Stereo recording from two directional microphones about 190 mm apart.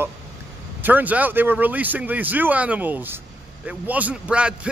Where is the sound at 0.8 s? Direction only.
10° right (ahead or behind).